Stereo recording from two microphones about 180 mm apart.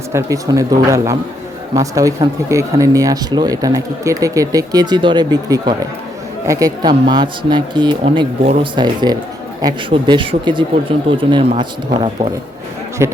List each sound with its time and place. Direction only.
0.1 s speech: 15° right (ahead or behind)
13.0 s speech: 15° right (ahead or behind)